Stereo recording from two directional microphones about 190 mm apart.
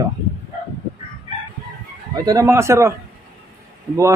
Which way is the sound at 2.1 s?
20° right (ahead or behind).